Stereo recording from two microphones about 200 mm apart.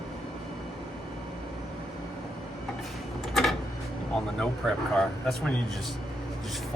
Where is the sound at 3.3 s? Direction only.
Centre (ahead or behind).